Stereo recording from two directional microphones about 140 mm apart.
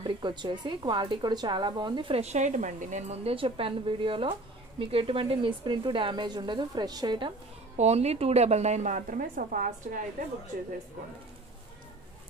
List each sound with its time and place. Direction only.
0.0 s a woman's voice: 35° right (ahead or behind)
7.7 s a woman's voice: 50° right (ahead or behind); by 9.9 s 75° right (ahead or behind)